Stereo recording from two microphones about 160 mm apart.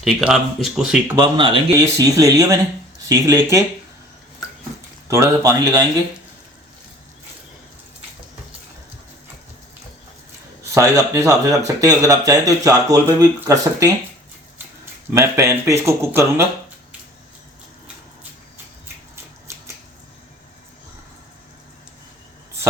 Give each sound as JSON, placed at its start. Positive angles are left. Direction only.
{"t": 0.0, "sound": "speech", "side_deg": 0}
{"t": 1.4, "sound": "a man's voice", "side_deg": -30}
{"t": 1.8, "sound": "speech", "side_deg": -20}
{"t": 5.0, "sound": "speech", "side_deg": -20}
{"t": 10.6, "sound": "speech", "side_deg": -20}
{"t": 15.1, "sound": "speech", "side_deg": -15}
{"t": 19.1, "sound": "a sound", "side_deg": -15}